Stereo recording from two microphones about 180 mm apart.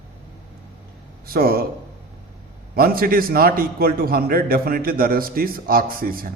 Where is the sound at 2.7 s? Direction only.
55° right (ahead or behind).